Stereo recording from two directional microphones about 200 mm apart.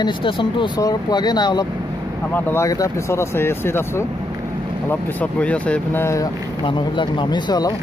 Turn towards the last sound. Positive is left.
turn(degrees=20)  # may be behind; listen again after turning